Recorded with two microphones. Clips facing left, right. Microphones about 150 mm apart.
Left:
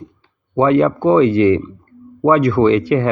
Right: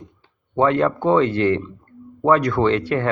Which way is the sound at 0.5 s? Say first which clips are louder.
Left 5 dB; 10° left (ahead or behind).